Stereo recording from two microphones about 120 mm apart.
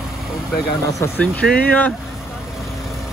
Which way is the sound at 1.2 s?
10° left (ahead or behind).